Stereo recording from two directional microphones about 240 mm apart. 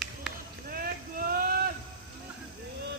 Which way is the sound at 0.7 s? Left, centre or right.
Right.